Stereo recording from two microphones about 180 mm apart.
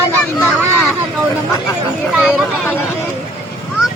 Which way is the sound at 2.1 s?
Centre (ahead or behind).